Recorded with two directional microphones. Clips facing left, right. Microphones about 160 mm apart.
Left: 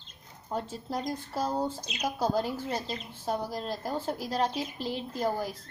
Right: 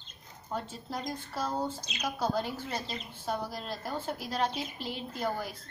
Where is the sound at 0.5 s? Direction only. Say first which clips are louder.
Left 3 dB; 35° left (ahead or behind).